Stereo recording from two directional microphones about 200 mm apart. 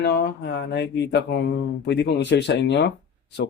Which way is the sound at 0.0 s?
60° left (ahead or behind).